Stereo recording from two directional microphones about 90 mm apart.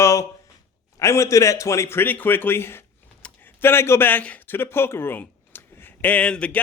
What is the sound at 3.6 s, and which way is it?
A man's voice, 25° left (ahead or behind).